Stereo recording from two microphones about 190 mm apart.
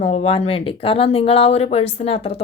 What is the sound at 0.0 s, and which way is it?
Speech, 35° left (ahead or behind).